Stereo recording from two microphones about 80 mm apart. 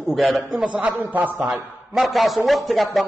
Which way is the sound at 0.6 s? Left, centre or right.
Centre.